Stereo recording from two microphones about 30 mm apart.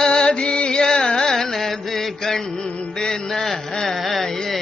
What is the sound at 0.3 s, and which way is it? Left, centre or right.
Carnatic music, left.